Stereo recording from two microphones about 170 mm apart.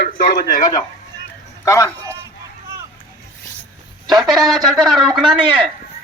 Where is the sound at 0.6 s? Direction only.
20° left (ahead or behind).